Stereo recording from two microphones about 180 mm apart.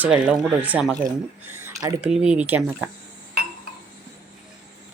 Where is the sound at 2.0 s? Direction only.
5° right (ahead or behind).